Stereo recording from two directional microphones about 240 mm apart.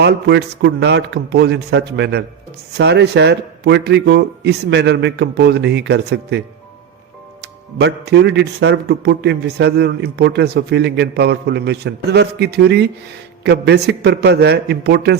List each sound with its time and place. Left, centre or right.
0.0 s speech: right
7.4 s speech: right